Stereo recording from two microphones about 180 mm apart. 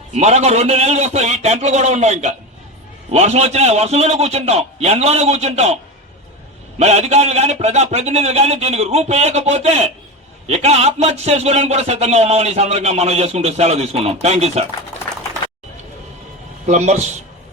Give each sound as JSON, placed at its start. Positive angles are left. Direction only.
{"t": 0.1, "sound": "a man's voice", "side_deg": -35}
{"t": 16.6, "sound": "a man's voice", "side_deg": -40}